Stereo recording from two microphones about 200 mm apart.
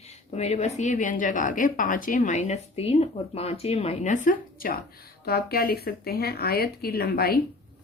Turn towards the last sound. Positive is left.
turn(degrees=50)  # may be behind; listen again after turning